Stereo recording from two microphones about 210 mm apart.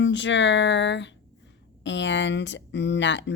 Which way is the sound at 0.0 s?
60° left (ahead or behind).